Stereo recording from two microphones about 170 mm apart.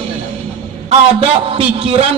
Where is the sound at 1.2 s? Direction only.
35° right (ahead or behind).